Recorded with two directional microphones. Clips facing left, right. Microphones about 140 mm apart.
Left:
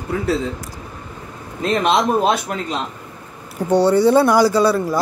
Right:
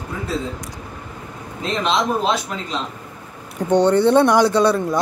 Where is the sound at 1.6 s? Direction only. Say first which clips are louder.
Left 4 dB; 55° left (ahead or behind).